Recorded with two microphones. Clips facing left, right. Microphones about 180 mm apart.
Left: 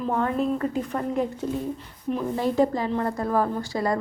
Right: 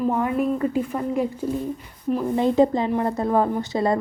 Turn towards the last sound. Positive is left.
turn(degrees=-25)  # may be behind; listen again after turning